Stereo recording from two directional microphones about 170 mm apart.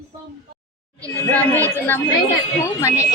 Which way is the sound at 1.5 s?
15° right (ahead or behind).